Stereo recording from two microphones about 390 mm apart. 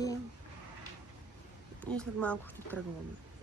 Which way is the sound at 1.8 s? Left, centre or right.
Centre.